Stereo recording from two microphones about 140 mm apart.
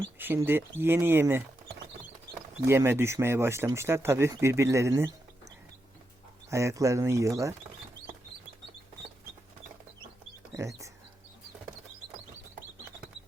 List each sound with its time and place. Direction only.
0.2 s speech: 15° right (ahead or behind)
2.6 s speech: 15° right (ahead or behind)
6.5 s speech: 20° right (ahead or behind)
10.5 s speech: 20° right (ahead or behind)